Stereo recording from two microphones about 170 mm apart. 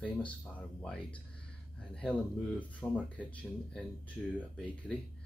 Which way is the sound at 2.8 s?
15° left (ahead or behind).